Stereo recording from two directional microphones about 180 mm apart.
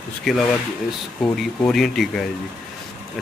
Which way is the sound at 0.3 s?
Centre (ahead or behind).